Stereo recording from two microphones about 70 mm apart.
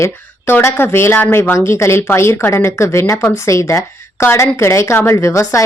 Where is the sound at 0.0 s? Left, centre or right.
Left.